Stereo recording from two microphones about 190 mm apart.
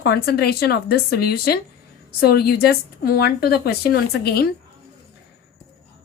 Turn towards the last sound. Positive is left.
turn(degrees=55)  # may be behind; listen again after turning